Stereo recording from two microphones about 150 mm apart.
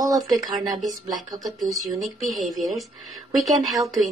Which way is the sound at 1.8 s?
Centre (ahead or behind).